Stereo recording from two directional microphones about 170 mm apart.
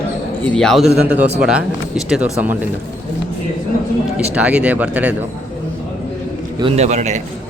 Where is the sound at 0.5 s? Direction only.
Centre (ahead or behind).